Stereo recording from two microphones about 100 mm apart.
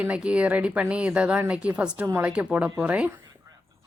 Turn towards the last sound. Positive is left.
turn(degrees=-10)  # may be behind; listen again after turning